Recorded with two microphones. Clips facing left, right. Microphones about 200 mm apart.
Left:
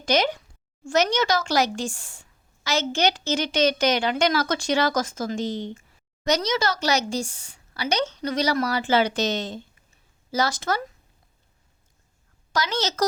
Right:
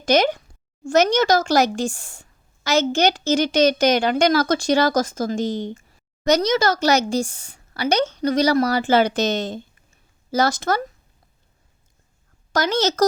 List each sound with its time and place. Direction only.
0.0 s a woman's voice: 50° right (ahead or behind)
12.5 s a woman's voice: 50° right (ahead or behind)